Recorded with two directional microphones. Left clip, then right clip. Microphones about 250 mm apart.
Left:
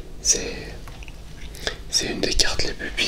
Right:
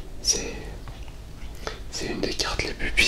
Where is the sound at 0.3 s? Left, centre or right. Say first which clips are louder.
Left 3 dB; centre.